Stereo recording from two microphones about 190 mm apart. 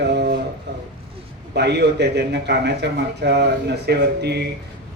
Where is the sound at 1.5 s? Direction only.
60° right (ahead or behind).